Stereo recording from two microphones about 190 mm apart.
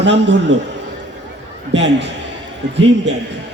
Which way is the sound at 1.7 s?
70° right (ahead or behind).